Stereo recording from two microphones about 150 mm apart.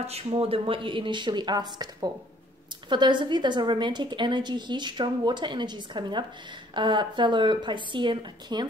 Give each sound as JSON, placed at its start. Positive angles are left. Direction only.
{"t": 0.0, "sound": "a woman's voice", "side_deg": -40}